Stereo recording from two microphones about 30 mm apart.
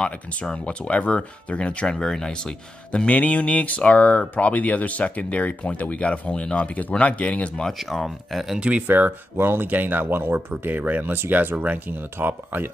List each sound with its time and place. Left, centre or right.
0.7 s speech: left
1.9 s speech: centre
3.1 s speech: left
7.9 s speech: centre
8.7 s speech: right
9.6 s speech: right